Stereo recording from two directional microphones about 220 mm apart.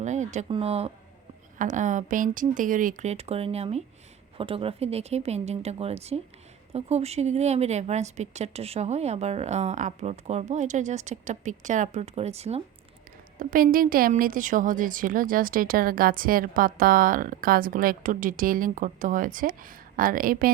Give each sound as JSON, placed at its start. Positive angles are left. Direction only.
{"t": 0.0, "sound": "a woman's voice", "side_deg": -35}
{"t": 13.4, "sound": "a woman's voice", "side_deg": -40}